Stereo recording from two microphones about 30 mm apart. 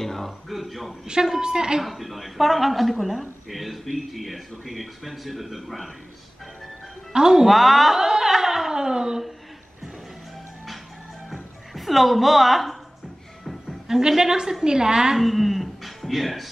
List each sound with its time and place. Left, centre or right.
0.0 s a sound: centre
0.5 s speech: centre
1.4 s a woman's voice: right
1.8 s speech: centre
7.1 s a woman's voice: right
7.4 s speech: centre
8.0 s a sound: centre
11.2 s music: centre
13.8 s a woman's voice: centre
15.1 s speech: centre